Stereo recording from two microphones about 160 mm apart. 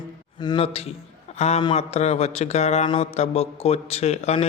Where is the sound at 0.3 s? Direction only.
30° left (ahead or behind).